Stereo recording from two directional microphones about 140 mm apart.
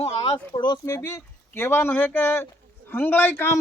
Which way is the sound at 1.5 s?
15° left (ahead or behind).